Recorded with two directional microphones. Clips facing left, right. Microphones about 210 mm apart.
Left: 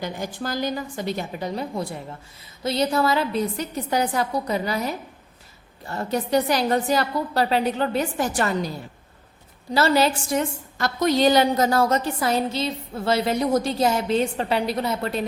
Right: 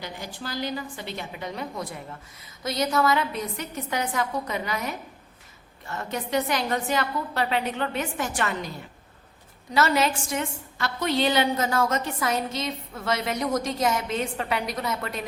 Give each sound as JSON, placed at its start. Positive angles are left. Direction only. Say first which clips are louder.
{"t": 0.0, "sound": "a woman's voice", "louder": "left 7 dB", "side_deg": 45}
{"t": 9.7, "sound": "a woman's voice", "louder": "left 3 dB", "side_deg": 35}